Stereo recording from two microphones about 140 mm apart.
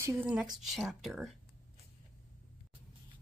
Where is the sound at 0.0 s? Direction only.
20° right (ahead or behind).